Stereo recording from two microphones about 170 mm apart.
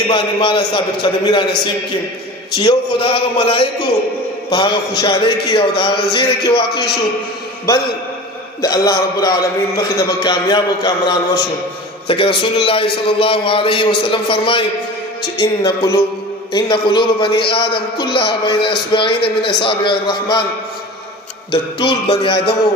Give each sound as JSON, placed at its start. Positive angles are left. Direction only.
{"t": 0.1, "sound": "a man's voice", "side_deg": 30}
{"t": 2.5, "sound": "a man's voice", "side_deg": 30}
{"t": 8.5, "sound": "a man's voice", "side_deg": 20}
{"t": 21.5, "sound": "a man's voice", "side_deg": 30}